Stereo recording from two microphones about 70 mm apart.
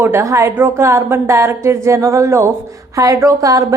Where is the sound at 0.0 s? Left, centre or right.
Right.